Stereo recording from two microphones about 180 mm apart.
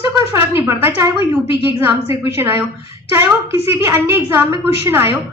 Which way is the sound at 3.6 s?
10° right (ahead or behind).